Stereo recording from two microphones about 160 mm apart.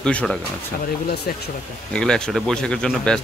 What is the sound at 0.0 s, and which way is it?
Speech, 5° left (ahead or behind).